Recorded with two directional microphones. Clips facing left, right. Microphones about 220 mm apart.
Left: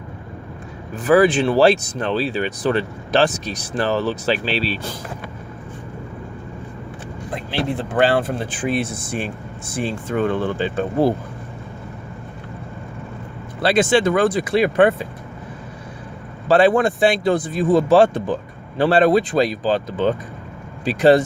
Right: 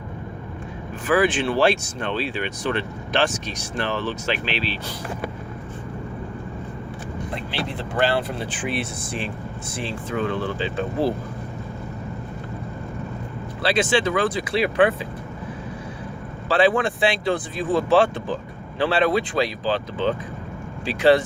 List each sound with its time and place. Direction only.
1.0 s speech: 40° left (ahead or behind)
7.3 s speech: 50° left (ahead or behind)
13.6 s speech: 45° left (ahead or behind)
16.5 s speech: 45° left (ahead or behind)